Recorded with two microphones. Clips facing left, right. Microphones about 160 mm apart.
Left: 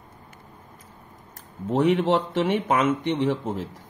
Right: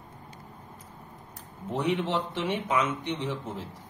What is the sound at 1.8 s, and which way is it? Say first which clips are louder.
Speech: left 7 dB; 55° left (ahead or behind).